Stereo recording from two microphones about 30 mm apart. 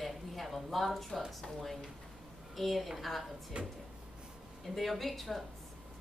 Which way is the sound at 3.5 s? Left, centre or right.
Right.